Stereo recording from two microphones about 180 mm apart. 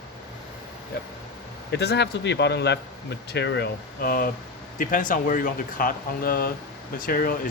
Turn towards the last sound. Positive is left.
turn(degrees=50)  # may be behind; listen again after turning